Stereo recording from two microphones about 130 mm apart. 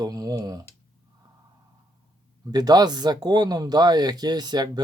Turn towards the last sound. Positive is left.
turn(degrees=-30)  # may be behind; listen again after turning